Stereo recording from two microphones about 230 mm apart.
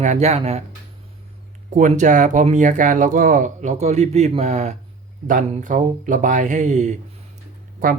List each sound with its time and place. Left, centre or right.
0.0 s speech: right
1.7 s speech: right